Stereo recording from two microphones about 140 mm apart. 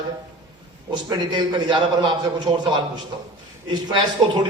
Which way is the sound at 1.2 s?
35° right (ahead or behind).